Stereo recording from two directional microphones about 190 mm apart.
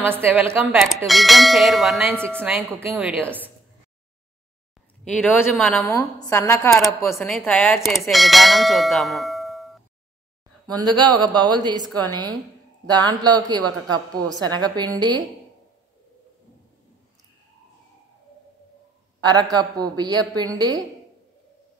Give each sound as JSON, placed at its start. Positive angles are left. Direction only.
{"t": 0.0, "sound": "a woman's voice", "side_deg": -10}
{"t": 5.2, "sound": "a woman's voice", "side_deg": 10}
{"t": 11.0, "sound": "a woman's voice", "side_deg": -25}
{"t": 19.2, "sound": "a woman's voice", "side_deg": -20}